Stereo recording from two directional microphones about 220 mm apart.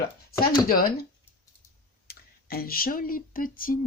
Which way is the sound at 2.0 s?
45° left (ahead or behind).